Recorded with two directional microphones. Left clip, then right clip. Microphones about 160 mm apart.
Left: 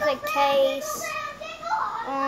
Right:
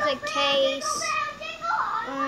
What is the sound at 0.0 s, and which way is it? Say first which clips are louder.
Child singing: left 2 dB; 25° right (ahead or behind).